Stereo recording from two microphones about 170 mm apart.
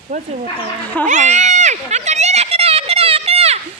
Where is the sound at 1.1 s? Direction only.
45° right (ahead or behind).